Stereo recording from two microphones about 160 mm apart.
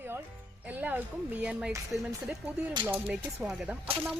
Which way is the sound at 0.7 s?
10° right (ahead or behind).